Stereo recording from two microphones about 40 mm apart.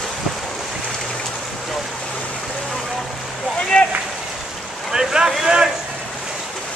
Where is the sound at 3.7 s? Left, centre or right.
Left.